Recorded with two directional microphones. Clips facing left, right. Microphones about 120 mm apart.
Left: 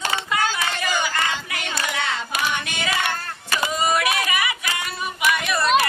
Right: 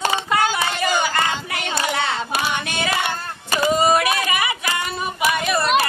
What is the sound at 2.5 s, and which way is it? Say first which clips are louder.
Female singing: right 3 dB; 20° right (ahead or behind).